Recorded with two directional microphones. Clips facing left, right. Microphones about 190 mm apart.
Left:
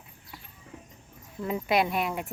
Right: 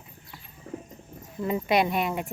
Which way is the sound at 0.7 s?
40° right (ahead or behind).